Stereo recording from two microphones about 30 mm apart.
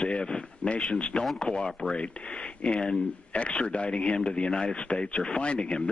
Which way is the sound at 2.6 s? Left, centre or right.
Left.